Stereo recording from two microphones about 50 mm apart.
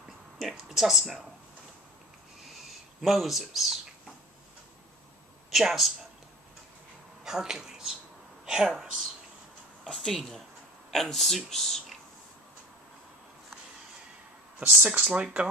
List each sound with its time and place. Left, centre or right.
0.4 s a sound: centre
3.0 s speech: centre
5.5 s speech: centre
7.2 s speech: centre
9.9 s speech: centre
14.6 s speech: right
15.0 s speech: right